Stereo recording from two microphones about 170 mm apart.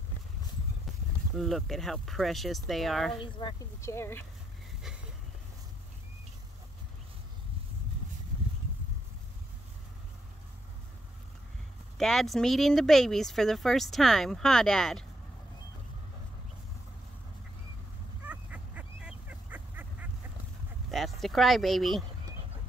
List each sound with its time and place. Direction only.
1.3 s speech: centre (ahead or behind)
3.2 s speech: 25° left (ahead or behind)
12.0 s speech: centre (ahead or behind)
18.2 s goose: 10° right (ahead or behind)
20.9 s speech: centre (ahead or behind)